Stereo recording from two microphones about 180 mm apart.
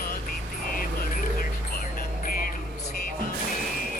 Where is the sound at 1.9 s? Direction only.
50° left (ahead or behind).